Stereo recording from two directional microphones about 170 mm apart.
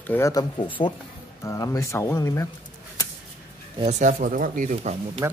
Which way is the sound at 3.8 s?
50° right (ahead or behind).